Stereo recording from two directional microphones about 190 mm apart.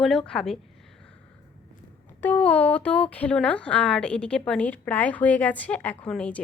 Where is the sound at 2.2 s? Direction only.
10° left (ahead or behind).